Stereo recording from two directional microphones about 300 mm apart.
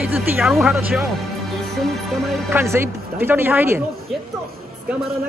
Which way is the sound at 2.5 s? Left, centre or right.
Centre.